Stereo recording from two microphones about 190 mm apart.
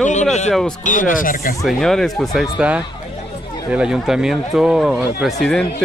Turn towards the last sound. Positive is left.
turn(degrees=0)  # may be behind; listen again after turning